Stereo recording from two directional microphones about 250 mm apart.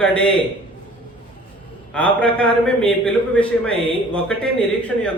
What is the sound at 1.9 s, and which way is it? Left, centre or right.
A man's voice, centre.